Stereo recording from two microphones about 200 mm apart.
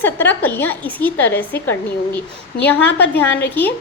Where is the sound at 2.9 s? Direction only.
55° left (ahead or behind).